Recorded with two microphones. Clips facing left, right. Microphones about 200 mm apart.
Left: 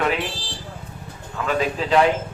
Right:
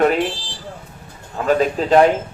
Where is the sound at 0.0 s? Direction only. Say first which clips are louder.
Right 7 dB; 45° right (ahead or behind).